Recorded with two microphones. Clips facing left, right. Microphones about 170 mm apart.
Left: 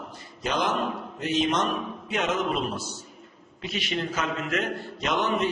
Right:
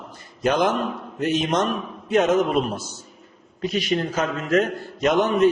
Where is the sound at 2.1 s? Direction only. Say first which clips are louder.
Right 9 dB; 45° right (ahead or behind).